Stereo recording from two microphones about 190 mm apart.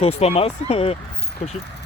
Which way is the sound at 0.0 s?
30° left (ahead or behind).